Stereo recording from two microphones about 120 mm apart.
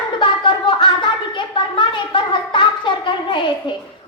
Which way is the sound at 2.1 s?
45° left (ahead or behind).